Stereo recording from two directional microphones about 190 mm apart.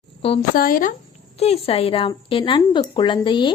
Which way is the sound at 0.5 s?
50° left (ahead or behind).